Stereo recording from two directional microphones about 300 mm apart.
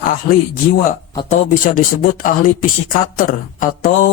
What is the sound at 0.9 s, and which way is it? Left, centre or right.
Speech, left.